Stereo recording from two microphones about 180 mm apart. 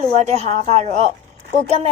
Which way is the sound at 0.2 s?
40° right (ahead or behind).